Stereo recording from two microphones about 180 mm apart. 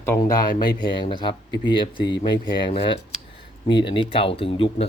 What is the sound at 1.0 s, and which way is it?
Speech, 25° left (ahead or behind).